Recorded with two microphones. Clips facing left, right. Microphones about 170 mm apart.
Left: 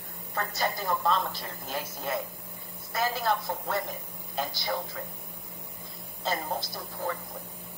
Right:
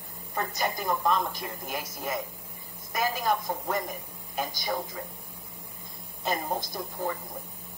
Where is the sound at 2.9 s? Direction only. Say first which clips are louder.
Right 1 dB; 15° right (ahead or behind).